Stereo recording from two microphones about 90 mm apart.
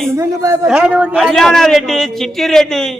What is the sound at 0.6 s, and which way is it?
Speech, 10° right (ahead or behind).